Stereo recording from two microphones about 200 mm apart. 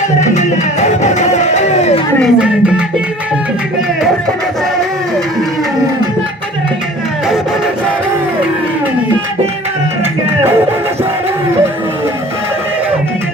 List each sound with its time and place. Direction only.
0.2 s music: 35° left (ahead or behind)
2.2 s speech: 5° right (ahead or behind)